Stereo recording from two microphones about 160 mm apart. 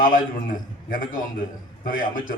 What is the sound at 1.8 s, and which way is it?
Speech, 60° left (ahead or behind).